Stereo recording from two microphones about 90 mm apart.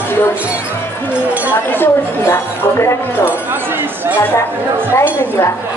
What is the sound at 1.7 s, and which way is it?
Speech, 25° left (ahead or behind).